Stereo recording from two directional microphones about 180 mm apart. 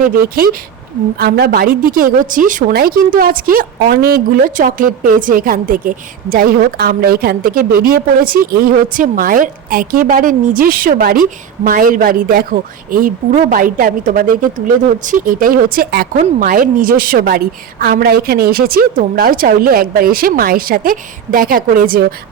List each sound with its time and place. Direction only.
0.0 s a woman's voice: 55° right (ahead or behind)